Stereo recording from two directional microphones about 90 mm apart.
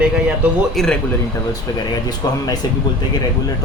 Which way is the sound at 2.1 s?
50° left (ahead or behind).